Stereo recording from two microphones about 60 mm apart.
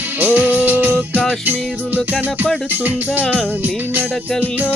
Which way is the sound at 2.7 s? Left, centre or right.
Right.